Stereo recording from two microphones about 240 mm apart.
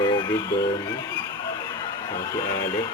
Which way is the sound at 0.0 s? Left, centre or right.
Centre.